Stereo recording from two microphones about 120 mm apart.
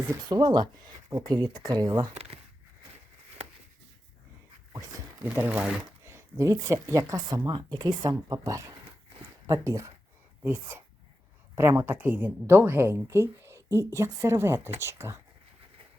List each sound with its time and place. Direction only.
0.1 s speech: 35° right (ahead or behind)
5.4 s speech: 10° right (ahead or behind)